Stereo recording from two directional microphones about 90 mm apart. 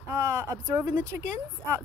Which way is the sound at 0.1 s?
35° right (ahead or behind).